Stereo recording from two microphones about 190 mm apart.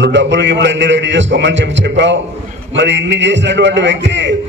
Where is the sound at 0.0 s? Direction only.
70° right (ahead or behind).